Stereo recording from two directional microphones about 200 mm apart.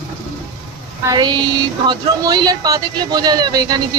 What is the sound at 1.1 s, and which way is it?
A man's voice, 20° right (ahead or behind).